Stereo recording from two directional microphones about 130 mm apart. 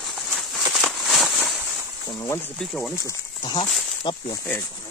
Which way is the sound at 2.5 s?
Centre (ahead or behind).